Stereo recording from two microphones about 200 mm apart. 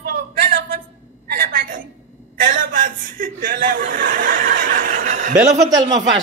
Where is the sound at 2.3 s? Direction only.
45° right (ahead or behind).